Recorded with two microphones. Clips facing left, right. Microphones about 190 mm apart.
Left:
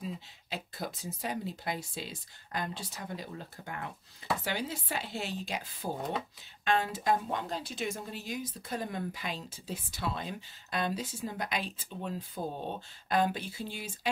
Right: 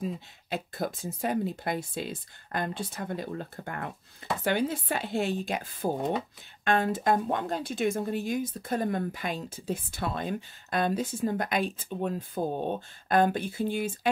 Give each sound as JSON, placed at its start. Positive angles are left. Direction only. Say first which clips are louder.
{"t": 0.0, "sound": "speech", "louder": "right 6 dB", "side_deg": -50}